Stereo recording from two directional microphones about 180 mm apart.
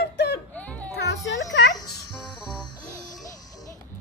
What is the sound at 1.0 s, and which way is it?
Music, 75° left (ahead or behind).